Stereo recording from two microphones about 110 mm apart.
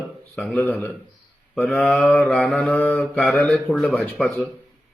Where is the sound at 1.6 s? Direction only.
5° left (ahead or behind).